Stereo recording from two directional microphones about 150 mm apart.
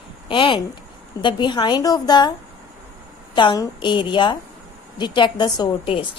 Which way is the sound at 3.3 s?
30° left (ahead or behind).